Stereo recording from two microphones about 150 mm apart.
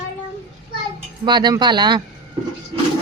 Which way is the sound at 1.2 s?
30° right (ahead or behind).